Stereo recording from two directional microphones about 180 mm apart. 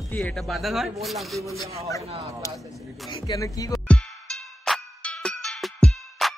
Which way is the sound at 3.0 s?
25° left (ahead or behind).